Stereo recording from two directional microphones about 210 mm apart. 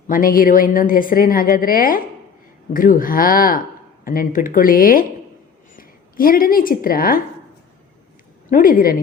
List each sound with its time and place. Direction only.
0.1 s a woman's voice: 40° left (ahead or behind)
8.4 s speech: 40° left (ahead or behind)